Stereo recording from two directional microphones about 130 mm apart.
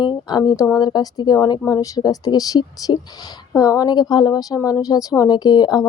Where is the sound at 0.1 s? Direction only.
35° left (ahead or behind).